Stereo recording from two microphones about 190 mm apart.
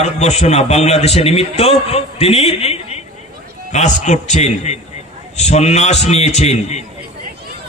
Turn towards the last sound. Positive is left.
turn(degrees=35)  # may be behind; listen again after turning